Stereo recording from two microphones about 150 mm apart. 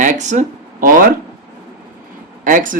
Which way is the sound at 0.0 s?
55° right (ahead or behind).